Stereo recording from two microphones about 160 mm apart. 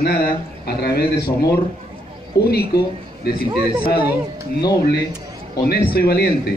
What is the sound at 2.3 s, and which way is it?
Speech, 85° left.